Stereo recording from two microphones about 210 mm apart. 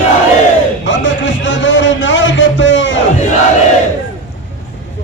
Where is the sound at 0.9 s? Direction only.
60° left (ahead or behind).